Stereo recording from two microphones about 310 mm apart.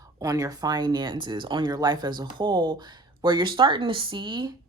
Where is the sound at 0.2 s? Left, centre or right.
Centre.